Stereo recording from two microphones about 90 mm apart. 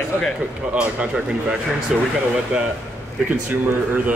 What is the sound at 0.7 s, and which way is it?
Speech, 15° right (ahead or behind).